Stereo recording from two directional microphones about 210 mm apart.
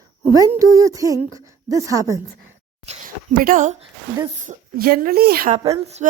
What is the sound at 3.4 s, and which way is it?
A woman's voice, 40° right (ahead or behind).